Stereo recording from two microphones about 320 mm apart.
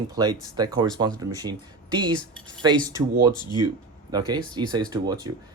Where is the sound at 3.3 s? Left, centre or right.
Centre.